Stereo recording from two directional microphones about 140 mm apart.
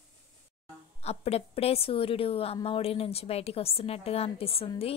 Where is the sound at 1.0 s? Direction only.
45° left (ahead or behind).